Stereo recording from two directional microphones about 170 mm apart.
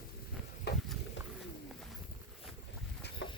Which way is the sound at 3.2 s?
90° left.